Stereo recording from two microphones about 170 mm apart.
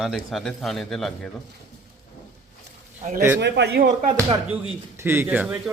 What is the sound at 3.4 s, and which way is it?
Speech, 85° right.